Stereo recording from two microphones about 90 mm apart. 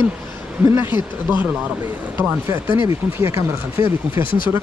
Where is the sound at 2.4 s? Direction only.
25° right (ahead or behind).